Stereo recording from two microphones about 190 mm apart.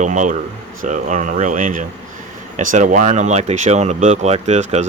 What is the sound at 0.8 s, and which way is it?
Speech, 40° right (ahead or behind).